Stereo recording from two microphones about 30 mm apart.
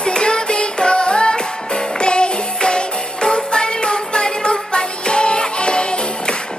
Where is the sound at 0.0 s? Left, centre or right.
Left.